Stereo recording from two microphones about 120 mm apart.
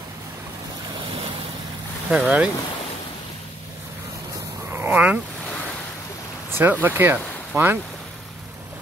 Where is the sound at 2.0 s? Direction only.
5° right (ahead or behind).